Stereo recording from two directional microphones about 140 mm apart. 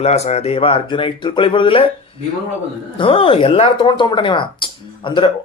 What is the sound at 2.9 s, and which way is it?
Speech, 40° left (ahead or behind).